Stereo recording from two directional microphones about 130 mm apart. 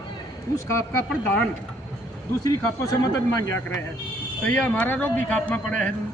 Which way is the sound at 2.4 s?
30° left (ahead or behind).